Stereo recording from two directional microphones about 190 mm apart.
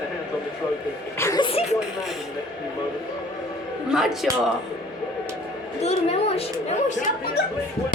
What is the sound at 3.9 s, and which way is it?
Speech, centre (ahead or behind).